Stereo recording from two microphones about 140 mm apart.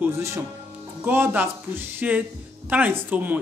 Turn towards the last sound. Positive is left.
turn(degrees=-15)  # may be behind; listen again after turning